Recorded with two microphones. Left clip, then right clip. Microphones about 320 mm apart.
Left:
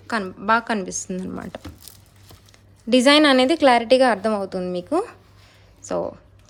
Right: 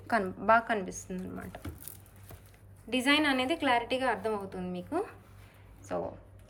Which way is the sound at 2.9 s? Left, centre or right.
Centre.